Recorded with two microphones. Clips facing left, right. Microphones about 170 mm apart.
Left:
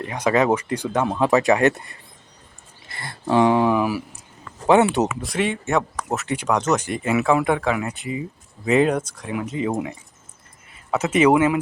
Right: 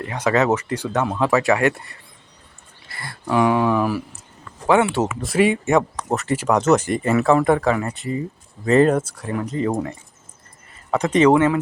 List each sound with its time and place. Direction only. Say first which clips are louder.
0.0 s speech: even; 15° left (ahead or behind)
3.8 s speech: right 1 dB; 10° left (ahead or behind)
4.6 s speech: left 1 dB; 20° left (ahead or behind)
5.2 s speech: right 6 dB; 5° right (ahead or behind)
6.8 s speech: right 3 dB; 5° left (ahead or behind)
10.9 s speech: right 2 dB; 5° left (ahead or behind)